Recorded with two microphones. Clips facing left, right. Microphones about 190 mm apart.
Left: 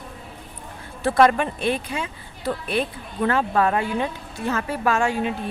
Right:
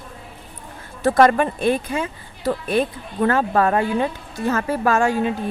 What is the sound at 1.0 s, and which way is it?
Speech, 45° right (ahead or behind).